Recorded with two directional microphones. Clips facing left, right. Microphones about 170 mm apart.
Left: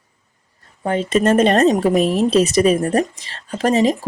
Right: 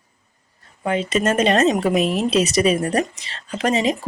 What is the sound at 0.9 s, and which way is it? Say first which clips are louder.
Speech: left 4 dB; 45° left (ahead or behind).